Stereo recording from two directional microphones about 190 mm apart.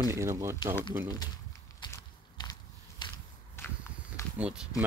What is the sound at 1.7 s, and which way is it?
Biting, 20° left (ahead or behind).